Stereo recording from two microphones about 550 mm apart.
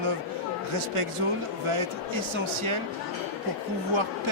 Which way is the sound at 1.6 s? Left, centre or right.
Right.